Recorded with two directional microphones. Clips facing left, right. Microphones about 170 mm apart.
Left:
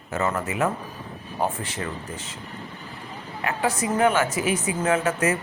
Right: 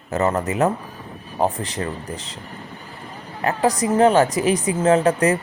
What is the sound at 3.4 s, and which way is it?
A woman's voice, 40° right (ahead or behind).